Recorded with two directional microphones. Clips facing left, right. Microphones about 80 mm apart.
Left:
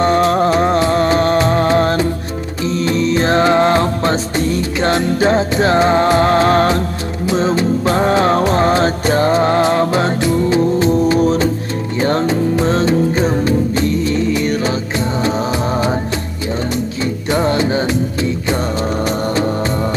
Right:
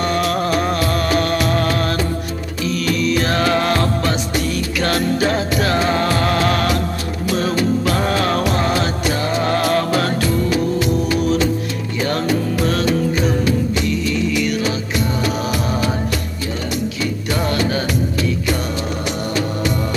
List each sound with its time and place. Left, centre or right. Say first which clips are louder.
0.0 s music: left 6 dB; left
17.0 s music: left 7 dB; left